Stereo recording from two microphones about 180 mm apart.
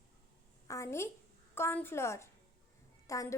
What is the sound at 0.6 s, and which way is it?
A woman's voice, 15° left (ahead or behind).